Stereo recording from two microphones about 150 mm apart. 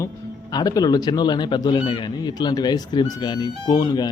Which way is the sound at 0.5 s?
25° left (ahead or behind).